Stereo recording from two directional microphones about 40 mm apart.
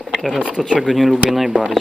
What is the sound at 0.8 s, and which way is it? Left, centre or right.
Speech, centre.